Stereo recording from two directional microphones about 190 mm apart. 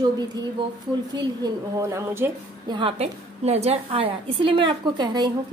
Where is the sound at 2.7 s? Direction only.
30° right (ahead or behind).